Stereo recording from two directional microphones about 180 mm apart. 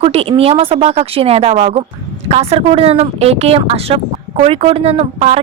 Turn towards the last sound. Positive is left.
turn(degrees=-35)  # may be behind; listen again after turning